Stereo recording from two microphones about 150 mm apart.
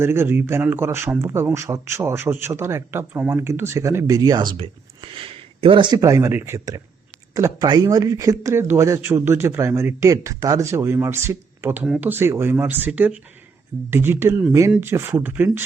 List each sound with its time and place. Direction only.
0.0 s speech: 15° right (ahead or behind)